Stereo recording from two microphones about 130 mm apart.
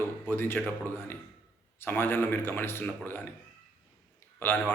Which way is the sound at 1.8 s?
15° left (ahead or behind).